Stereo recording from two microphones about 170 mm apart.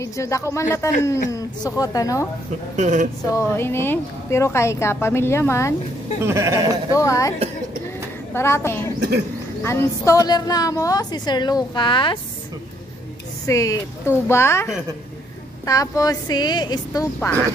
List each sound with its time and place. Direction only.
0.0 s a woman's voice: 15° left (ahead or behind)
2.7 s speech: 45° right (ahead or behind)
3.3 s a woman's voice: 15° left (ahead or behind)
6.2 s a sound: 15° right (ahead or behind)
6.9 s a woman's voice: 20° left (ahead or behind)
13.5 s a woman's voice: 20° left (ahead or behind)